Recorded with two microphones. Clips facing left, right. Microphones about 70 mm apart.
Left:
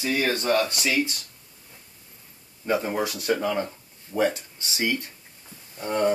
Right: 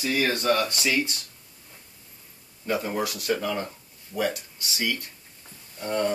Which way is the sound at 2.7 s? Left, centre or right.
Left.